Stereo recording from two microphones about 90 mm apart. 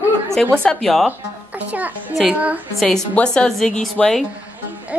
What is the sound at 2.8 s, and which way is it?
A woman's voice, 5° left (ahead or behind).